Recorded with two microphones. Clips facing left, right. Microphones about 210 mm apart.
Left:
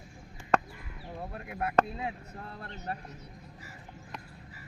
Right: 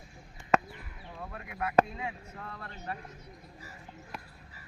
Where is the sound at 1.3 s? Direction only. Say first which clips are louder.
Left 1 dB; 35° left (ahead or behind).